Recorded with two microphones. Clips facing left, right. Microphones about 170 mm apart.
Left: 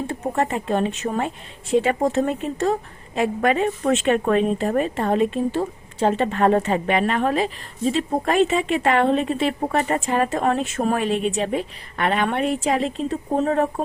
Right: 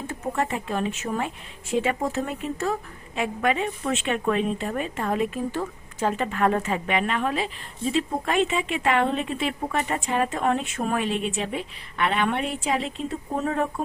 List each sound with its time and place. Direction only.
0.1 s speech: 35° left (ahead or behind)